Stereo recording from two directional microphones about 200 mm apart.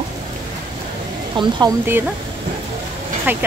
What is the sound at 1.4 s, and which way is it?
Speech, 25° right (ahead or behind).